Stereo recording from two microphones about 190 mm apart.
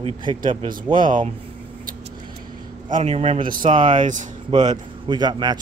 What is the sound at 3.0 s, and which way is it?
A man's voice, 30° right (ahead or behind).